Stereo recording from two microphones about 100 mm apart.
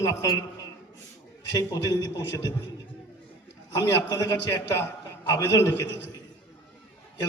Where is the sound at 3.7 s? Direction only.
40° left (ahead or behind).